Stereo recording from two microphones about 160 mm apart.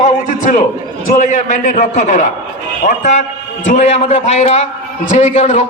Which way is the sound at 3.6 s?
45° left (ahead or behind).